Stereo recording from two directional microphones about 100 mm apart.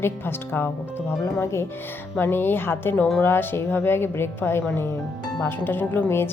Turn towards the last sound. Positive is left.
turn(degrees=25)  # may be behind; listen again after turning